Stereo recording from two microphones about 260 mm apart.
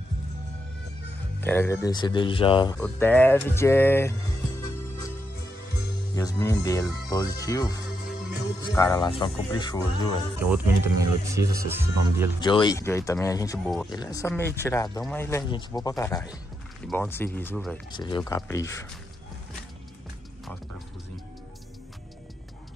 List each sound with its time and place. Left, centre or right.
1.4 s speech: centre
2.8 s speech: centre
6.1 s speech: centre
10.4 s speech: centre
12.4 s speech: centre
17.9 s speech: centre